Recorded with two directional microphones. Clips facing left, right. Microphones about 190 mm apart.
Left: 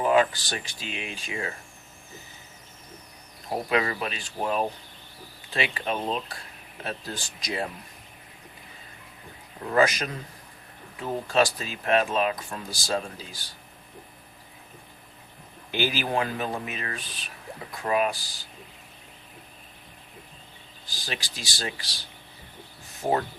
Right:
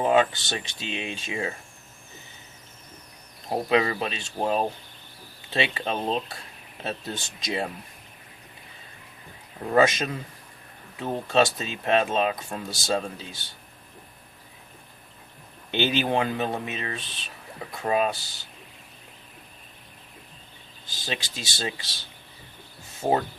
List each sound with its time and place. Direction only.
0.0 s speech: 25° right (ahead or behind)
3.7 s speech: 25° right (ahead or behind)
9.7 s speech: 25° right (ahead or behind)
15.7 s speech: 25° right (ahead or behind)
20.8 s speech: 20° right (ahead or behind)